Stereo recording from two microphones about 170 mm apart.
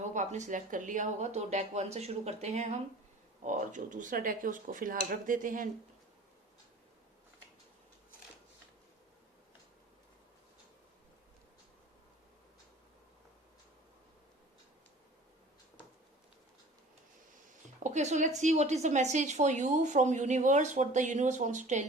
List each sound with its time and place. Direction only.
0.1 s a woman's voice: 45° right (ahead or behind)
17.8 s a woman's voice: 45° right (ahead or behind)